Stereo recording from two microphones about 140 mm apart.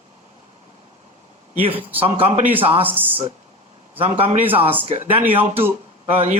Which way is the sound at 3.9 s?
40° right (ahead or behind).